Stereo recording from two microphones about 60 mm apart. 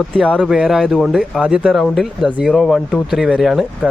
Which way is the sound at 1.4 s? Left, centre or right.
Centre.